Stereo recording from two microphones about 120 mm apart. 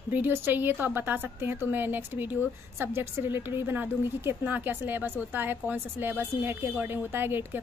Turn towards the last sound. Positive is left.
turn(degrees=-20)  # may be behind; listen again after turning